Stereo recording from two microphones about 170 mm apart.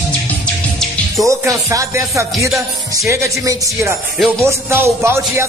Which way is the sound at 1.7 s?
15° right (ahead or behind).